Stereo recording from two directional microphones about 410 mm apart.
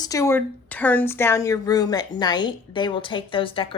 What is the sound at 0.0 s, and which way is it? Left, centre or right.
A woman's voice, centre.